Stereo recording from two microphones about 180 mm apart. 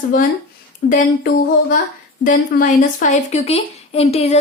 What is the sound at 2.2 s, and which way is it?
Speech, 50° left (ahead or behind).